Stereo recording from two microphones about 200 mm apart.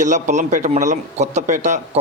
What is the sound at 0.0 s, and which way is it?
Speech, 35° right (ahead or behind).